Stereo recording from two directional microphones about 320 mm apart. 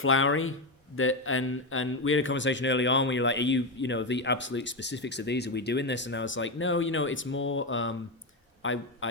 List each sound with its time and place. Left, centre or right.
0.0 s a man's voice: left